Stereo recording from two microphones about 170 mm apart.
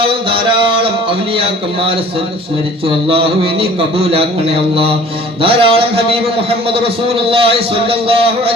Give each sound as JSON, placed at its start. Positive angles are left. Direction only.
{"t": 0.1, "sound": "a man's voice", "side_deg": -30}
{"t": 3.1, "sound": "a man's voice", "side_deg": -30}